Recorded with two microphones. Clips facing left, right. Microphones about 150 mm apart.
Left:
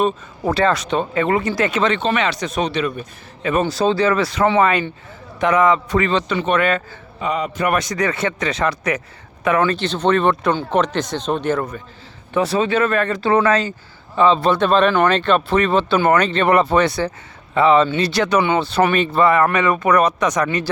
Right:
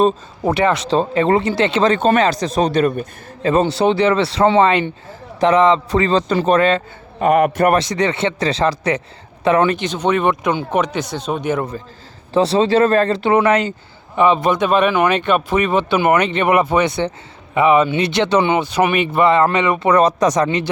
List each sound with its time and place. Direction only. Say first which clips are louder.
0.4 s speech: right 1 dB; 20° right (ahead or behind); by 3.1 s 50° right (ahead or behind)
3.4 s speech: right 3 dB; 25° right (ahead or behind)
7.2 s a man's voice: right 8 dB; 60° right (ahead or behind)
7.7 s speech: right 3 dB; 30° right (ahead or behind); by 11.7 s 15° right (ahead or behind)
12.3 s speech: right 4 dB; 30° right (ahead or behind)
13.3 s speech: right 1 dB; 20° right (ahead or behind); by 20.5 s 35° right (ahead or behind)